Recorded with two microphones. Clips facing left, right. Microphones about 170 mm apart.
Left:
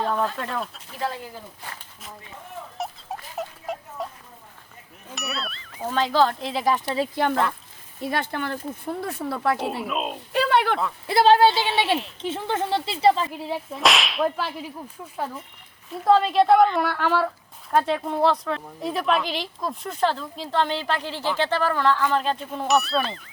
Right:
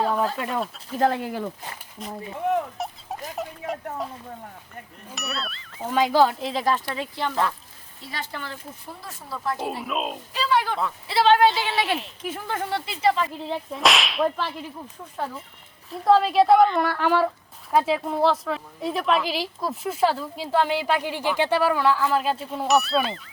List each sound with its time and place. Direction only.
0.0 s speech: 5° right (ahead or behind)
0.9 s speech: 60° right (ahead or behind); by 1.5 s 75° right (ahead or behind)
2.7 s a sound: centre (ahead or behind)
5.1 s ding: centre (ahead or behind)
5.9 s speech: 10° right (ahead or behind)
6.4 s whip: 5° left (ahead or behind)
7.2 s speech: 50° left (ahead or behind)
9.8 s whip: centre (ahead or behind)
10.3 s speech: 60° left (ahead or behind)
11.1 s speech: 40° left (ahead or behind)
11.4 s whip: centre (ahead or behind)
12.2 s speech: 25° left (ahead or behind)
13.4 s whip: 5° left (ahead or behind)
17.2 s speech: 10° right (ahead or behind)